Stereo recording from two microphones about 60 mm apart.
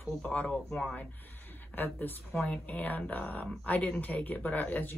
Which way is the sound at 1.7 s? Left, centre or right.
Left.